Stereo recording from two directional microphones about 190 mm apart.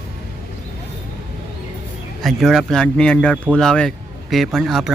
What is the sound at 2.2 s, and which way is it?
Speech, centre (ahead or behind).